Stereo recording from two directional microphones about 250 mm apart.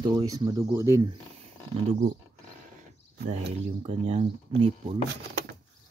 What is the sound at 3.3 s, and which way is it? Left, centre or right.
Speech, right.